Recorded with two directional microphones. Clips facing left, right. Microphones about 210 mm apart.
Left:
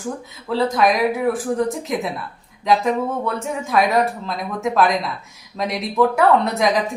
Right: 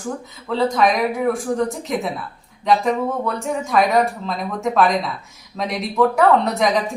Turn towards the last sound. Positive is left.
turn(degrees=0)  # may be behind; listen again after turning